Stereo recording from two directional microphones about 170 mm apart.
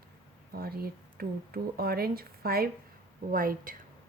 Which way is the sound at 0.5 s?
60° right (ahead or behind).